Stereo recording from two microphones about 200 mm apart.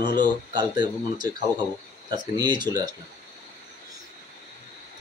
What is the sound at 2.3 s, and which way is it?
Speech, 20° right (ahead or behind).